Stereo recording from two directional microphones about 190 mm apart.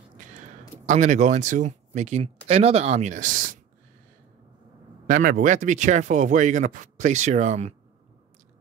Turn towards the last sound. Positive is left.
turn(degrees=-40)  # may be behind; listen again after turning